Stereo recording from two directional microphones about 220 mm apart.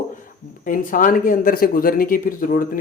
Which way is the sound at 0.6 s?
40° left (ahead or behind).